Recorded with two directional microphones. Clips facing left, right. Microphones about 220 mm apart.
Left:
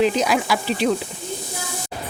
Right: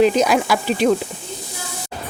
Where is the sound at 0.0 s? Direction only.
45° right (ahead or behind).